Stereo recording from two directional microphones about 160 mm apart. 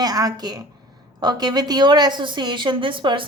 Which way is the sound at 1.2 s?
25° right (ahead or behind).